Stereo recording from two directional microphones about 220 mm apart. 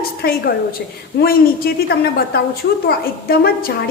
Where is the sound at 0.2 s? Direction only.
45° left (ahead or behind).